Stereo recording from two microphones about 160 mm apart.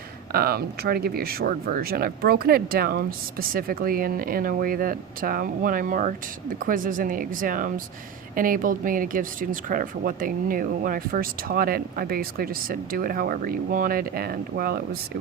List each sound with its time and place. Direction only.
0.3 s speech: 75° right (ahead or behind)